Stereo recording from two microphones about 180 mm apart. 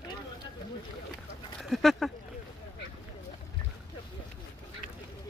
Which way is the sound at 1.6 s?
Centre (ahead or behind).